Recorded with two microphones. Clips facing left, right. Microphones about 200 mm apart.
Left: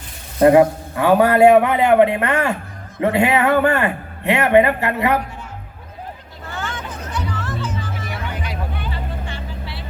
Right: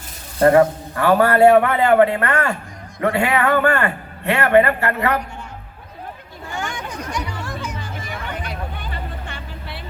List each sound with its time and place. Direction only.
0.3 s a man's voice: 15° left (ahead or behind)
6.5 s music: 15° right (ahead or behind)
8.8 s vehicle: 50° right (ahead or behind)